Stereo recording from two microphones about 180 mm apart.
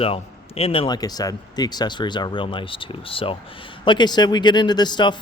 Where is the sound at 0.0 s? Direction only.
35° left (ahead or behind).